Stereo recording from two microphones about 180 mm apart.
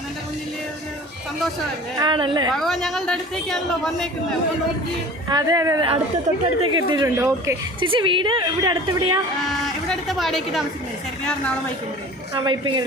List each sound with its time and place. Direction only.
2.0 s a woman's voice: 25° right (ahead or behind)
2.5 s a woman's voice: centre (ahead or behind)
5.3 s a woman's voice: 20° right (ahead or behind)
7.8 s a woman's voice: 30° right (ahead or behind)
9.5 s a sound: centre (ahead or behind)
12.3 s a woman's voice: 25° right (ahead or behind)